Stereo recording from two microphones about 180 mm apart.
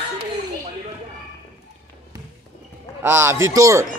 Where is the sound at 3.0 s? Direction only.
15° right (ahead or behind).